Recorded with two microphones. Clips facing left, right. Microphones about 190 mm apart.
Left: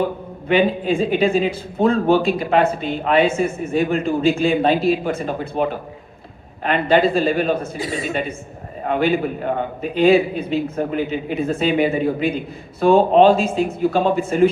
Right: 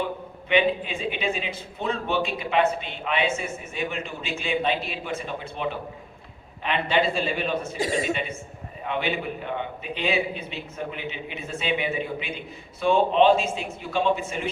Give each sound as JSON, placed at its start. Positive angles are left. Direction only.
{"t": 0.0, "sound": "a man's voice", "side_deg": 40}
{"t": 7.8, "sound": "a man's voice", "side_deg": -45}
{"t": 8.8, "sound": "a man's voice", "side_deg": 45}